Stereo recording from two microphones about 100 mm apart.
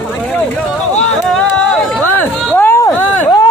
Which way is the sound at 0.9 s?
10° left (ahead or behind).